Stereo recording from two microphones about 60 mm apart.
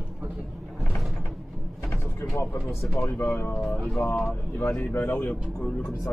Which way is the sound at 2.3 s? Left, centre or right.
Left.